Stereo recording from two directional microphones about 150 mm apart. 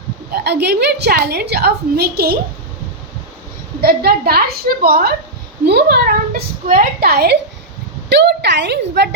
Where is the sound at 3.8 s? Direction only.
90° right.